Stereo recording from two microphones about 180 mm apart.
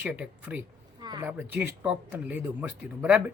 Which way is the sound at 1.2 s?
10° right (ahead or behind).